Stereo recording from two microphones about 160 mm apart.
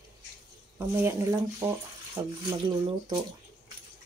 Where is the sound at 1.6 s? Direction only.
15° right (ahead or behind).